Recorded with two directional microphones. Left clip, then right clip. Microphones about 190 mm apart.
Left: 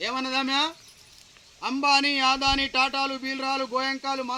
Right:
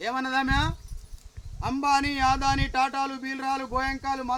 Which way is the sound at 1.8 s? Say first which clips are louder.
Left 2 dB; 15° right (ahead or behind).